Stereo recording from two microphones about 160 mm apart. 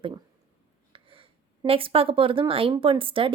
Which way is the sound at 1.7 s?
35° right (ahead or behind).